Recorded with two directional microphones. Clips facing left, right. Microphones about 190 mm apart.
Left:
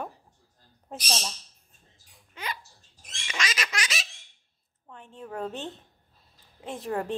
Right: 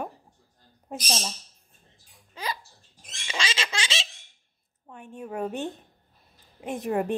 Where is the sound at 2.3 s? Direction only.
35° right (ahead or behind).